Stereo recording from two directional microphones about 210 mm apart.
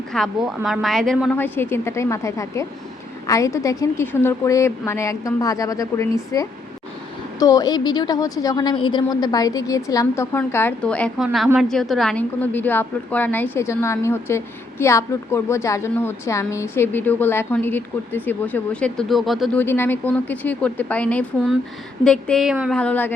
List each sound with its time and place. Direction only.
0.1 s a woman's voice: centre (ahead or behind)
19.6 s a woman's voice: 10° left (ahead or behind)
22.8 s a woman's voice: 5° left (ahead or behind)